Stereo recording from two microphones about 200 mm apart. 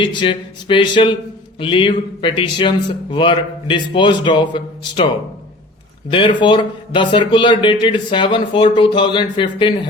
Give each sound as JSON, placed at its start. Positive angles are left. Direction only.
{"t": 0.0, "sound": "speech", "side_deg": 25}
{"t": 6.1, "sound": "speech", "side_deg": 25}